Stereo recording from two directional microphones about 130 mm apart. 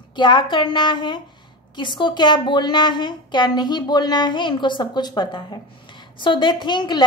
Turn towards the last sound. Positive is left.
turn(degrees=35)  # may be behind; listen again after turning